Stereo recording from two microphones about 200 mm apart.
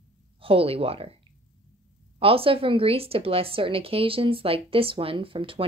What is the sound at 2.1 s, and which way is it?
A woman's voice, 30° right (ahead or behind).